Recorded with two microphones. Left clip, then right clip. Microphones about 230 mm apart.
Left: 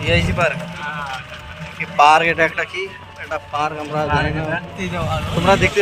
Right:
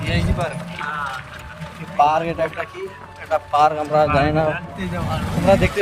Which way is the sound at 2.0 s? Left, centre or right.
Left.